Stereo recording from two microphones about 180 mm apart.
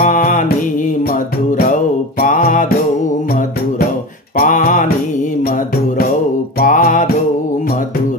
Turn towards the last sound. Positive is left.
turn(degrees=45)  # may be behind; listen again after turning